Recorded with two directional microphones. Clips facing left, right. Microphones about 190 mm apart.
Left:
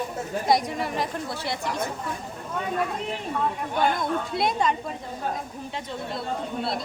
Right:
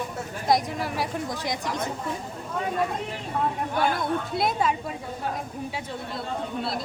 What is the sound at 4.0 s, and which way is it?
Speech, 5° right (ahead or behind).